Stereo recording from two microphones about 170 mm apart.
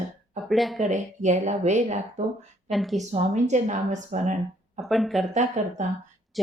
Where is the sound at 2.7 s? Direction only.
Centre (ahead or behind).